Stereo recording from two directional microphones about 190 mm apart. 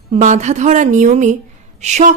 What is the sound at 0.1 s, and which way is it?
A woman's voice, 40° right (ahead or behind).